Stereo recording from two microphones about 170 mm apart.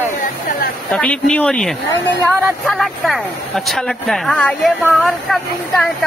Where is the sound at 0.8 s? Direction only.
5° left (ahead or behind).